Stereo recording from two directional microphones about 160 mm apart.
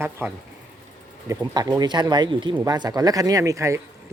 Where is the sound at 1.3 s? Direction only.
25° right (ahead or behind).